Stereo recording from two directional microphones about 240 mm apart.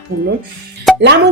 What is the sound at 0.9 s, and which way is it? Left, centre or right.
Plop, centre.